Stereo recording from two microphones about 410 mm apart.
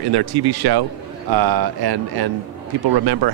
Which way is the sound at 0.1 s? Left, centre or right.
Right.